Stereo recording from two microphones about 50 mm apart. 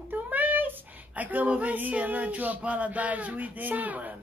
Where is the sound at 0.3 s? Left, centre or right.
Right.